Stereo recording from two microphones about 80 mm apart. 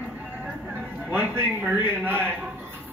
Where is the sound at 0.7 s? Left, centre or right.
Right.